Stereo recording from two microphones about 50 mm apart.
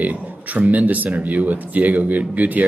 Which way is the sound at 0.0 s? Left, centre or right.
Right.